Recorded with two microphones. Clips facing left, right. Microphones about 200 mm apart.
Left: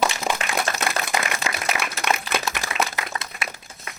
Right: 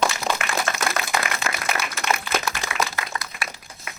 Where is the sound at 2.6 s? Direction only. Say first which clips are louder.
Left 1 dB; 20° left (ahead or behind).